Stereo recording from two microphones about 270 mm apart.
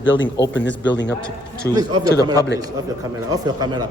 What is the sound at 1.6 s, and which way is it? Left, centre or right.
Speech, centre.